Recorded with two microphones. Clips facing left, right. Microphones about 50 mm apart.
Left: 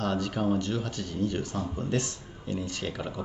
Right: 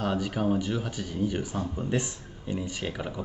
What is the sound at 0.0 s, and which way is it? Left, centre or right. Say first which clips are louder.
Speech: right 1 dB; centre.